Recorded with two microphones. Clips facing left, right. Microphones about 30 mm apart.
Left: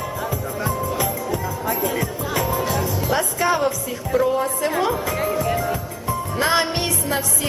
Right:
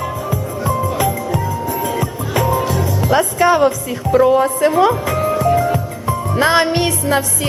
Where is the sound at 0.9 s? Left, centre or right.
Right.